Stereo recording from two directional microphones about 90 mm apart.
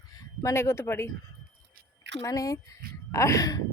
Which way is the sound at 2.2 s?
40° left (ahead or behind).